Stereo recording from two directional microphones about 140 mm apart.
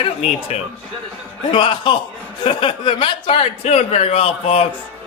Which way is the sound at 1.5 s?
35° left (ahead or behind).